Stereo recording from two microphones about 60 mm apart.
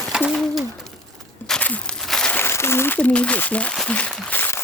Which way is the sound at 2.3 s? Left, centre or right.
Left.